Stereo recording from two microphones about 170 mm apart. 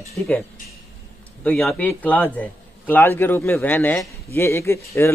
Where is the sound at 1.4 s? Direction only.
5° left (ahead or behind).